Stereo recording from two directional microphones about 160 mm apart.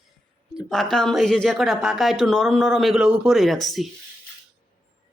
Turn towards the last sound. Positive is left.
turn(degrees=0)  # may be behind; listen again after turning